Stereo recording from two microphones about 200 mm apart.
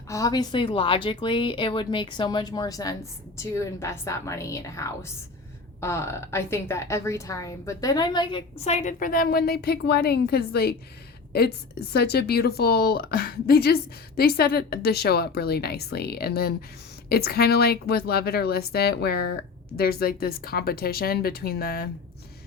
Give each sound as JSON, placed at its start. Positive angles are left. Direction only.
{"t": 0.1, "sound": "a woman's voice", "side_deg": 15}